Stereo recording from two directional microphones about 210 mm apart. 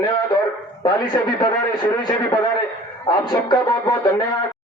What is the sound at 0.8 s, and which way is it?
A man's voice, 20° left (ahead or behind).